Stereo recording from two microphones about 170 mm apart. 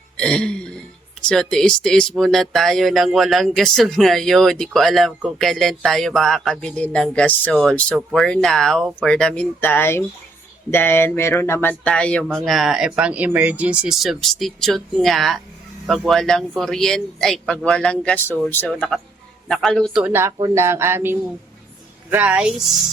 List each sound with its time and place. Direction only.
0.2 s a man's voice: 5° left (ahead or behind)